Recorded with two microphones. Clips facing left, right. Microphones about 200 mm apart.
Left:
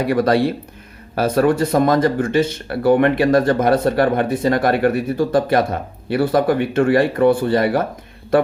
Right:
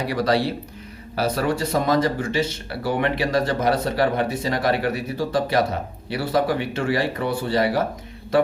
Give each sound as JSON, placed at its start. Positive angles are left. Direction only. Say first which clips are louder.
{"t": 0.0, "sound": "speech", "louder": "left 5 dB", "side_deg": 50}